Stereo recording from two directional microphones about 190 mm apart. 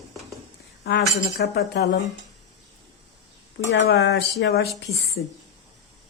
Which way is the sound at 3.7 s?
60° left (ahead or behind).